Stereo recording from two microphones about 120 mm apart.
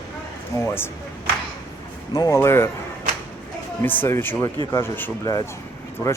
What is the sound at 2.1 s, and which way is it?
Speech, 30° left (ahead or behind).